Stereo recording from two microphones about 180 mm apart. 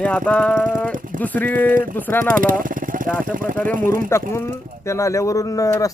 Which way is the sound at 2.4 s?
50° right (ahead or behind).